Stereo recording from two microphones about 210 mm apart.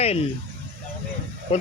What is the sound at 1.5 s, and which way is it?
Speech, 30° left (ahead or behind).